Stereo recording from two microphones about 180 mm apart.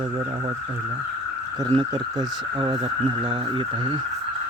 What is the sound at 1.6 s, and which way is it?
Speech, 25° right (ahead or behind).